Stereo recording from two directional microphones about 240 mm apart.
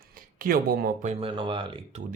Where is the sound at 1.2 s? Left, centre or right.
Right.